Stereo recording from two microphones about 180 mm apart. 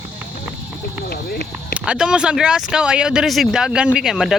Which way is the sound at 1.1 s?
60° left (ahead or behind).